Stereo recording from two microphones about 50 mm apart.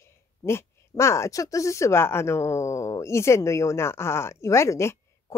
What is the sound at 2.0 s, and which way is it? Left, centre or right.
Speech, left.